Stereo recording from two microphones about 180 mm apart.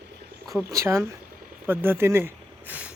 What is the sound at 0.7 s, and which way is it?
Speech, 15° right (ahead or behind).